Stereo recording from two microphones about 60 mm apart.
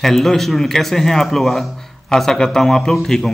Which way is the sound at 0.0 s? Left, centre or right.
Centre.